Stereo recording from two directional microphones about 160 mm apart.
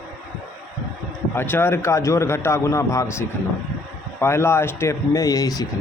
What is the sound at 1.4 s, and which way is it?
A man's voice, 15° left (ahead or behind).